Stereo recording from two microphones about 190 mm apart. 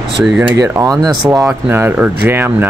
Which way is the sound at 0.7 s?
20° right (ahead or behind).